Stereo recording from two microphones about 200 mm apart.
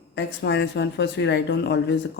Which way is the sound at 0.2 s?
60° left (ahead or behind).